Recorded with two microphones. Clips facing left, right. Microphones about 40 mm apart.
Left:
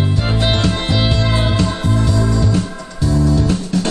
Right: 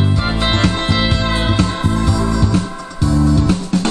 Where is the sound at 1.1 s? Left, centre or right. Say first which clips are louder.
Right 1 dB; right.